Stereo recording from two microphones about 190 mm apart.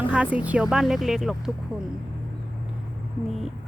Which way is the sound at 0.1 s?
5° right (ahead or behind).